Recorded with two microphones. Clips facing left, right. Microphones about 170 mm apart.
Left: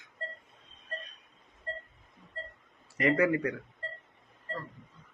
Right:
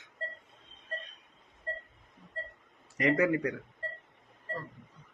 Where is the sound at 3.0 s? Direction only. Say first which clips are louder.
Left 1 dB; 20° right (ahead or behind).